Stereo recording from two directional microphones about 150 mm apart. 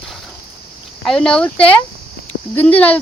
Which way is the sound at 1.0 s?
5° left (ahead or behind).